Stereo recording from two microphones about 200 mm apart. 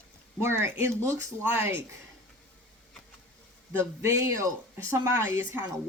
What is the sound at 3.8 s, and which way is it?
Speech, 15° right (ahead or behind).